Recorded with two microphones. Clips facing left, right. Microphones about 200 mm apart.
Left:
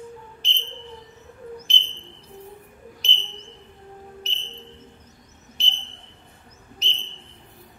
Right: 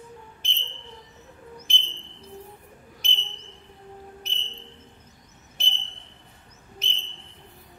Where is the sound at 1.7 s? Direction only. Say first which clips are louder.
Left 2 dB; 50° right (ahead or behind).